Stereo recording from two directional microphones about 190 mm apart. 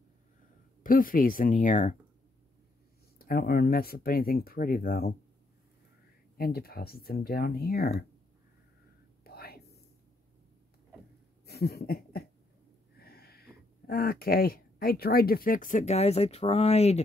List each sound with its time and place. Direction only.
0.8 s speech: 45° left (ahead or behind)
3.2 s speech: 50° left (ahead or behind)
6.3 s speech: 55° left (ahead or behind)
9.2 s whispering: 55° left (ahead or behind)
11.4 s a sound: 60° left (ahead or behind)
13.0 s speech: 55° left (ahead or behind); by 17.0 s 35° left (ahead or behind)